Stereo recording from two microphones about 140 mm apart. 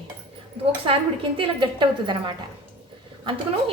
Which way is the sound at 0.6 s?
40° right (ahead or behind).